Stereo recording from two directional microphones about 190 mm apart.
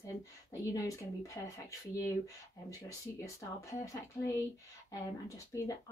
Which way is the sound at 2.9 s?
15° left (ahead or behind).